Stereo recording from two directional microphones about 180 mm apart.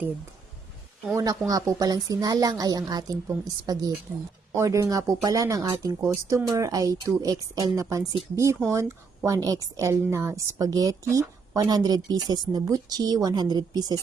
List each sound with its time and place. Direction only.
1.1 s a woman's voice: 20° right (ahead or behind)